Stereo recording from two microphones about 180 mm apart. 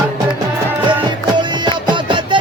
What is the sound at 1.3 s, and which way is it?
Music, 25° right (ahead or behind).